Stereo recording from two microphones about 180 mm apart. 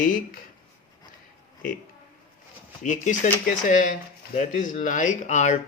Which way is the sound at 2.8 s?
45° left (ahead or behind).